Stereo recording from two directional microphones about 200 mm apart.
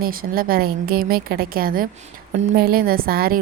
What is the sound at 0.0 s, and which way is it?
A woman's voice, 45° right (ahead or behind).